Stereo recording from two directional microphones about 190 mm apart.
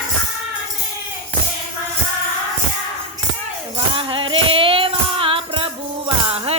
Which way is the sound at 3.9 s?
25° right (ahead or behind).